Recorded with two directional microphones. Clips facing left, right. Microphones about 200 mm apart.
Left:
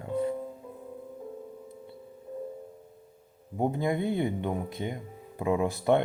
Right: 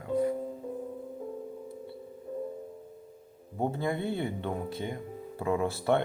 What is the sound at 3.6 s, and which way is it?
Speech, 15° left (ahead or behind).